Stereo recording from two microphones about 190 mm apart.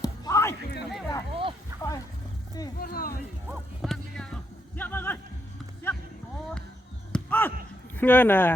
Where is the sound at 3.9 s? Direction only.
5° left (ahead or behind).